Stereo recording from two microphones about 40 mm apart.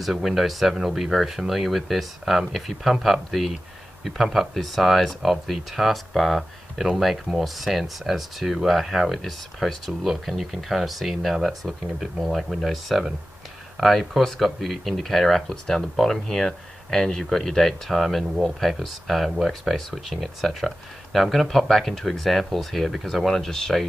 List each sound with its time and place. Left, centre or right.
0.0 s speech: centre
11.6 s speech: centre
12.0 s speech: centre